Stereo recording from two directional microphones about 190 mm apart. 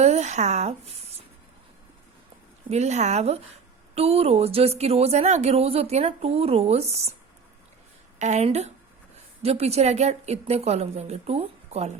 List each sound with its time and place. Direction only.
0.0 s speech: 35° right (ahead or behind)
2.6 s a woman's voice: 35° right (ahead or behind)
8.2 s a woman's voice: 35° right (ahead or behind)